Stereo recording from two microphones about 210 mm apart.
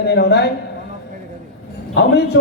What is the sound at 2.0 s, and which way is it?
Speech, 50° left (ahead or behind).